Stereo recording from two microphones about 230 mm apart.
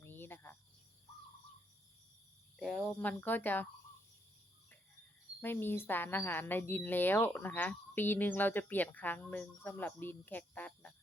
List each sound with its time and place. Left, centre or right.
0.0 s cricket: centre
2.6 s a woman's voice: centre
5.4 s a woman's voice: centre